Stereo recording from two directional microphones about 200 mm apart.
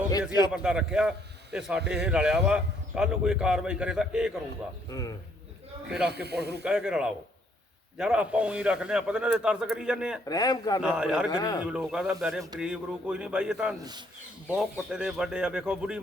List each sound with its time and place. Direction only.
0.5 s a man's voice: 5° right (ahead or behind)
4.9 s speech: 15° left (ahead or behind)
6.2 s speech: 55° right (ahead or behind)
6.7 s a man's voice: 5° right (ahead or behind)
10.2 s a man's voice: 20° left (ahead or behind)
10.8 s a man's voice: 5° right (ahead or behind)
11.3 s a man's voice: 20° left (ahead or behind)
11.6 s a man's voice: 5° right (ahead or behind)